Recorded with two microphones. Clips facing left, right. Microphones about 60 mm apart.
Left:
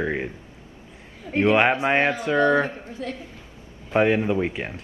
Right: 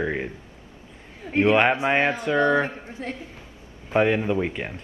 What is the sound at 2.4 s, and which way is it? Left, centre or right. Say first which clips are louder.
Speech: left 2 dB; right.